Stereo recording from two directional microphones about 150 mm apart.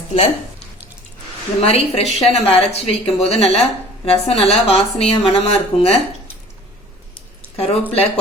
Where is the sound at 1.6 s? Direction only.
45° left (ahead or behind).